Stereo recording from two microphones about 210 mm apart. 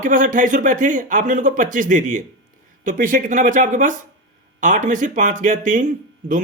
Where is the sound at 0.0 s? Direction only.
40° right (ahead or behind).